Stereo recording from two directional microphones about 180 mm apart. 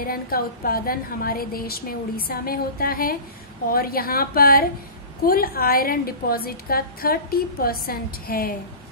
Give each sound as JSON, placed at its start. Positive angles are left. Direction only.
{"t": 0.0, "sound": "a woman's voice", "side_deg": 55}